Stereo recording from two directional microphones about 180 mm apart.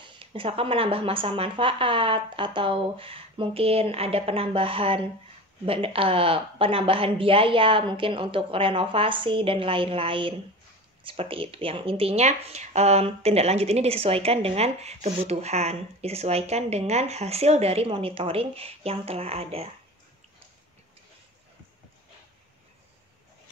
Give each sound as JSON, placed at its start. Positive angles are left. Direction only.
{"t": 0.0, "sound": "speech", "side_deg": -30}